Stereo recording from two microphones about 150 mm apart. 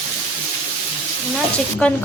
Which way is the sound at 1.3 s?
5° left (ahead or behind).